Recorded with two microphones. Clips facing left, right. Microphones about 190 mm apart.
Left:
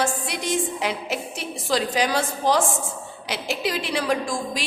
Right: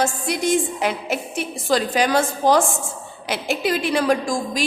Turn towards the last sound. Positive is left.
turn(degrees=-45)  # may be behind; listen again after turning